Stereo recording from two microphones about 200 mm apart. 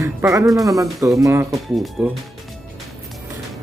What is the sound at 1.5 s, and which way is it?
Speech, centre (ahead or behind).